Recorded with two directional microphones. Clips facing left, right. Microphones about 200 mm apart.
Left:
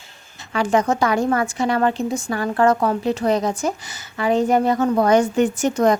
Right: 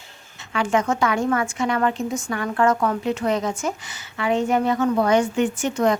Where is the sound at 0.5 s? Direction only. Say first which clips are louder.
Left 3 dB; 35° left (ahead or behind).